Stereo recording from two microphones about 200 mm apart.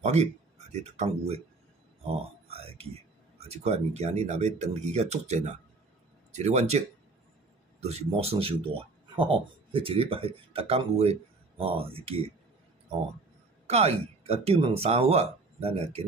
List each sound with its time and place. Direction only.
0.0 s speech: 35° right (ahead or behind)
2.4 s speech: 30° right (ahead or behind)
7.8 s speech: 30° right (ahead or behind)
13.7 s speech: 30° right (ahead or behind)